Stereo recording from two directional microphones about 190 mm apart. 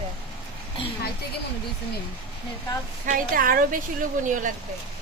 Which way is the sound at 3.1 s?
50° right (ahead or behind).